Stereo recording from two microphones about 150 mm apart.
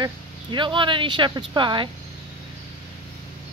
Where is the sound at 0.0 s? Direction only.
30° right (ahead or behind).